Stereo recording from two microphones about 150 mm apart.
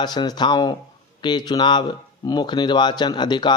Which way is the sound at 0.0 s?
30° left (ahead or behind).